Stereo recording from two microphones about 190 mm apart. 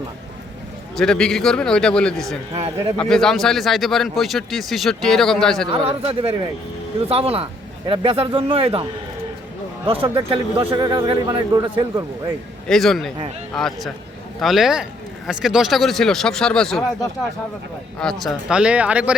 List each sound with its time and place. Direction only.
0.9 s speech: 5° left (ahead or behind)
2.6 s speech: 30° right (ahead or behind)
3.0 s speech: 5° left (ahead or behind)
5.7 s speech: 30° right (ahead or behind)
12.6 s speech: centre (ahead or behind)
18.0 s speech: centre (ahead or behind)